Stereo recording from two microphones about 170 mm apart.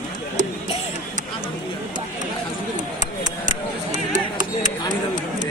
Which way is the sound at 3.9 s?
45° right (ahead or behind).